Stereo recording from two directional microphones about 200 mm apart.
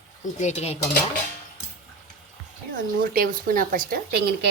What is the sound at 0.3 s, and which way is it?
Speech, 35° left (ahead or behind).